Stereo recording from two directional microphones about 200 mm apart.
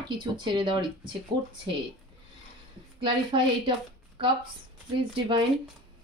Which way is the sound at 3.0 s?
25° right (ahead or behind).